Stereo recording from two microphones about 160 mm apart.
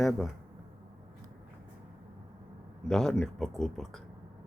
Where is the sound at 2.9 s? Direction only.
5° left (ahead or behind).